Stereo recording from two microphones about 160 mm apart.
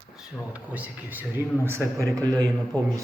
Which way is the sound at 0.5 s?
10° right (ahead or behind).